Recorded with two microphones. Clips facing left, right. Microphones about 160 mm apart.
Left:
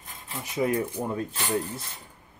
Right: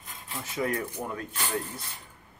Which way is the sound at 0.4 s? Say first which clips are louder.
Left 4 dB; 20° left (ahead or behind).